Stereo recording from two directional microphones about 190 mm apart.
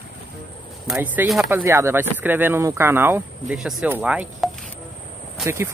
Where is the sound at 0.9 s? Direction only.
5° right (ahead or behind).